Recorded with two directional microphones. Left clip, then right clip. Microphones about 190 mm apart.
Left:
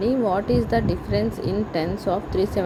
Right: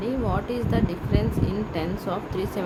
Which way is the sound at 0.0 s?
25° left (ahead or behind).